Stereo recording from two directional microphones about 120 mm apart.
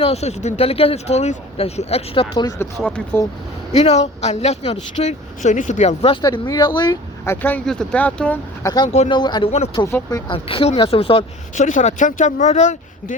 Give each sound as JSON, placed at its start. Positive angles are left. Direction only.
{"t": 0.0, "sound": "speech", "side_deg": 65}
{"t": 2.8, "sound": "speech", "side_deg": 10}
{"t": 3.7, "sound": "speech", "side_deg": 60}
{"t": 6.2, "sound": "speech", "side_deg": 30}
{"t": 7.3, "sound": "speech", "side_deg": 15}
{"t": 8.6, "sound": "speech", "side_deg": 35}
{"t": 10.3, "sound": "speech", "side_deg": 50}
{"t": 11.5, "sound": "speech", "side_deg": 90}